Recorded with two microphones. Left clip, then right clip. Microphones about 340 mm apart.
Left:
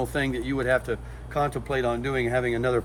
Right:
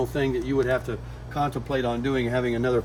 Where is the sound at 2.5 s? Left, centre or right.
Centre.